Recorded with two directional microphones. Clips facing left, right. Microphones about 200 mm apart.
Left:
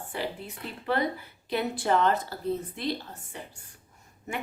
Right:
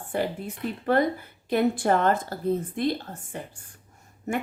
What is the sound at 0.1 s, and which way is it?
A woman's voice, 50° right (ahead or behind).